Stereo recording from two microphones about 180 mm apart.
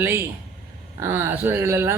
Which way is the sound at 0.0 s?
15° right (ahead or behind).